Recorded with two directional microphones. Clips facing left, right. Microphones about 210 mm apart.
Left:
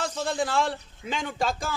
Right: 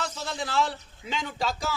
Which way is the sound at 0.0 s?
50° left (ahead or behind).